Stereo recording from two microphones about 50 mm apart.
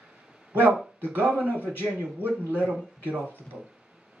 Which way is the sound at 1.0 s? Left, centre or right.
Right.